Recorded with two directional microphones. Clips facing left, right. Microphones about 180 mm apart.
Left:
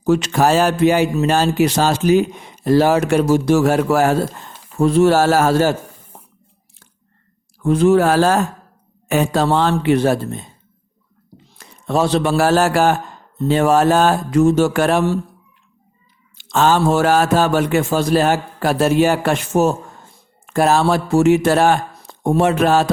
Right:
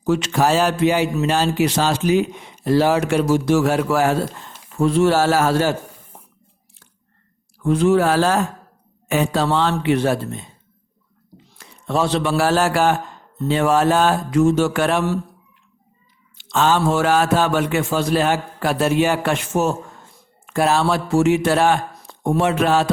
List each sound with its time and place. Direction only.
0.0 s a man's voice: 40° left (ahead or behind)
7.6 s a man's voice: 40° left (ahead or behind)
11.5 s a man's voice: 40° left (ahead or behind)
16.4 s a man's voice: 45° left (ahead or behind)